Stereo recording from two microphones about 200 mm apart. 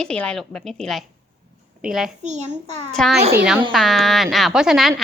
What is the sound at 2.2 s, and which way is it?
Speech, 35° right (ahead or behind).